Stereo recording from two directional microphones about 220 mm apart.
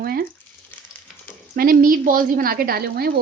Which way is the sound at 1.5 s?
40° right (ahead or behind).